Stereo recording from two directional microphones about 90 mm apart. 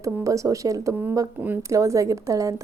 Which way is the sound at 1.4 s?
20° right (ahead or behind).